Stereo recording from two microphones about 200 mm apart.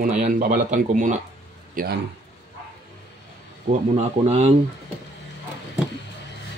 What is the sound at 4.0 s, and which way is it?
Speech, 30° right (ahead or behind).